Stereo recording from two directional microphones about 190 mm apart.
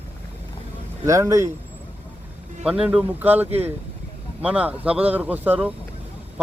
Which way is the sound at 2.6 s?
5° right (ahead or behind).